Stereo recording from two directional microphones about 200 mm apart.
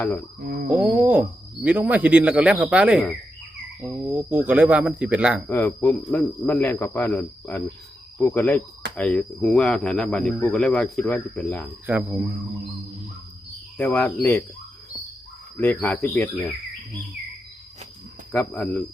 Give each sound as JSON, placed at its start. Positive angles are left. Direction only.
{"t": 0.0, "sound": "speech", "side_deg": 10}
{"t": 0.4, "sound": "a sound", "side_deg": -45}
{"t": 1.6, "sound": "speech", "side_deg": -5}
{"t": 5.5, "sound": "speech", "side_deg": 10}
{"t": 9.0, "sound": "cricket", "side_deg": 5}
{"t": 11.9, "sound": "speech", "side_deg": -10}
{"t": 13.7, "sound": "speech", "side_deg": 10}
{"t": 15.5, "sound": "speech", "side_deg": 10}
{"t": 18.3, "sound": "speech", "side_deg": 10}